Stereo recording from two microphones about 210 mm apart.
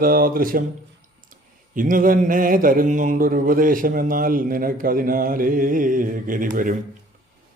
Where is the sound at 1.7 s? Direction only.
40° right (ahead or behind).